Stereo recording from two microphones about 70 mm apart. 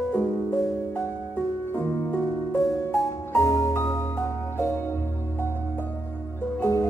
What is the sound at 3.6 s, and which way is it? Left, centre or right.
Music, left.